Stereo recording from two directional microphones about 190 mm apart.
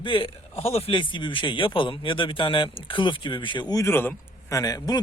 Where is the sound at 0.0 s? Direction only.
25° left (ahead or behind).